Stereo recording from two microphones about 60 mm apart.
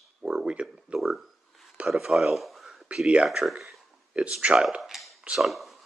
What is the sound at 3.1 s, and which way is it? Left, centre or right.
Speech, centre.